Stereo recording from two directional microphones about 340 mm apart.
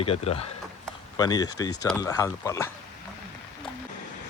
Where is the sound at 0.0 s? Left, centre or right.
Centre.